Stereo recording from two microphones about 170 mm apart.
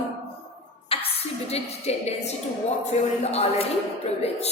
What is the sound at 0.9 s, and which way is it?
A woman's voice, 35° left (ahead or behind).